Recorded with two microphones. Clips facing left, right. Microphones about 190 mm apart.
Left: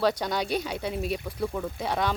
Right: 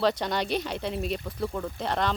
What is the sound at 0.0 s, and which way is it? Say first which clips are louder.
Speech: even; centre (ahead or behind).